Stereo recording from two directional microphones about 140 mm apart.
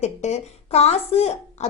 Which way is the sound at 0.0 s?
50° left (ahead or behind).